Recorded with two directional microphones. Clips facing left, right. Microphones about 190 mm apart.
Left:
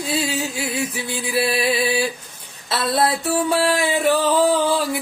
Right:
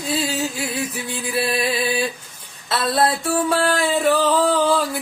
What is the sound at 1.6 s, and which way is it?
Music, 30° left (ahead or behind).